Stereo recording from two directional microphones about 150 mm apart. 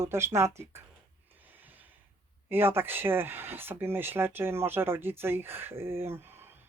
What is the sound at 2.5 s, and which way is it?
Speech, 15° right (ahead or behind).